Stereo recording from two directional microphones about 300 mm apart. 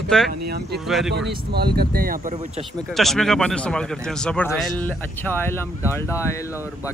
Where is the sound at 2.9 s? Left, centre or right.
Centre.